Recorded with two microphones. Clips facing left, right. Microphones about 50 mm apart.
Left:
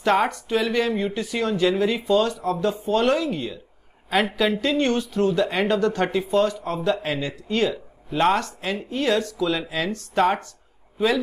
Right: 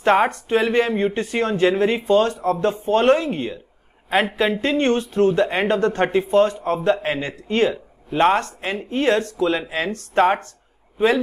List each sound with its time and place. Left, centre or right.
0.0 s speech: right